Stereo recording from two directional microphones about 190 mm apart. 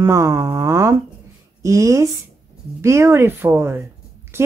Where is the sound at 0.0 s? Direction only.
15° right (ahead or behind).